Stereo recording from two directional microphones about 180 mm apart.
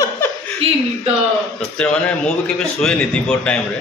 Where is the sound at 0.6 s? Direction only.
35° right (ahead or behind).